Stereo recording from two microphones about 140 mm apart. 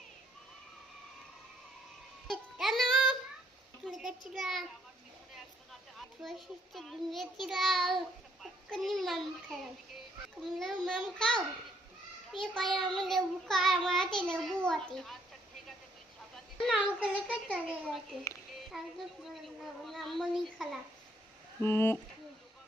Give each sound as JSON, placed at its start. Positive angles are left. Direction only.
{"t": 2.2, "sound": "child singing", "side_deg": 0}
{"t": 3.8, "sound": "a sound", "side_deg": 0}
{"t": 4.4, "sound": "a child's voice", "side_deg": 0}
{"t": 6.2, "sound": "a child's voice", "side_deg": -5}
{"t": 16.3, "sound": "a child's voice", "side_deg": 0}
{"t": 21.6, "sound": "speech", "side_deg": 15}